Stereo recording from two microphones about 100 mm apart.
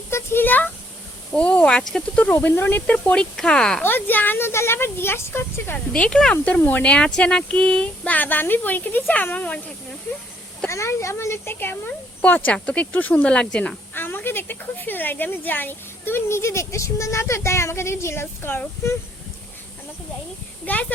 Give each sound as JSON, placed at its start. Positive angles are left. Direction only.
{"t": 0.1, "sound": "speech", "side_deg": 25}
{"t": 2.3, "sound": "speech", "side_deg": 25}
{"t": 3.8, "sound": "speech", "side_deg": 20}
{"t": 5.9, "sound": "speech", "side_deg": 10}
{"t": 10.7, "sound": "speech", "side_deg": 30}
{"t": 20.7, "sound": "speech", "side_deg": 15}